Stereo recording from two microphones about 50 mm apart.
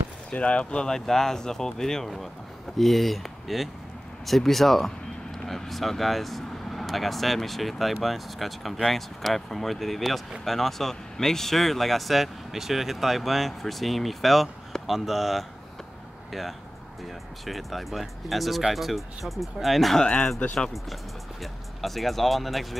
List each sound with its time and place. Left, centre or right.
0.3 s speech: left; by 20.0 s centre
20.0 s speech: centre
20.7 s speech: centre